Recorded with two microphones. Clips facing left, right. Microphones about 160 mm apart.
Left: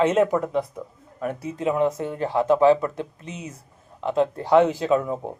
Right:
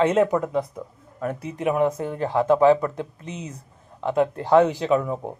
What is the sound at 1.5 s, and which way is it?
Speech, 20° right (ahead or behind).